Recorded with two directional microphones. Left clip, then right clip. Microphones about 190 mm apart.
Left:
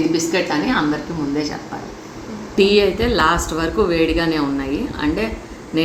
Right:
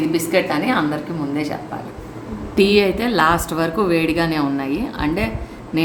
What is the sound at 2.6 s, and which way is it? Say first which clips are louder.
A woman's voice: left 1 dB; 60° right (ahead or behind).